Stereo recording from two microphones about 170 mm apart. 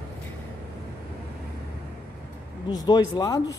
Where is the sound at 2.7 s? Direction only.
25° left (ahead or behind).